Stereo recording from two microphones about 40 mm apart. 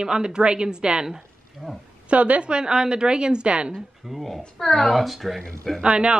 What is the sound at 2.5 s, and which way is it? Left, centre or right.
A woman's voice, centre.